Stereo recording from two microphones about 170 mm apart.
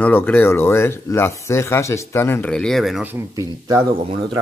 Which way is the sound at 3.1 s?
20° right (ahead or behind).